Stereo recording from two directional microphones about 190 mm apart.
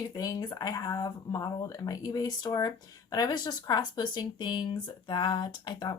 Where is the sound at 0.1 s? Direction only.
20° left (ahead or behind).